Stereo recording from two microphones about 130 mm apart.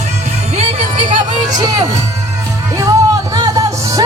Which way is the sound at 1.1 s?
30° right (ahead or behind).